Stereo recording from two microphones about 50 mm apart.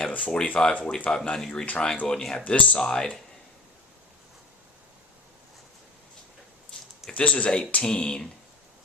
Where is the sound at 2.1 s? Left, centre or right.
Centre.